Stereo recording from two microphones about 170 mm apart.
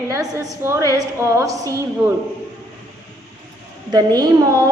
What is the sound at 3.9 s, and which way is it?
Speech, 25° right (ahead or behind).